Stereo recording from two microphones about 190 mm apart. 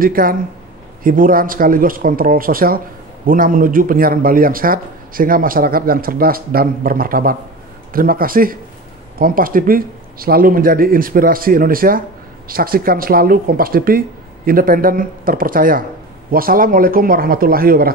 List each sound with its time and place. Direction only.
0.0 s speech: 50° right (ahead or behind)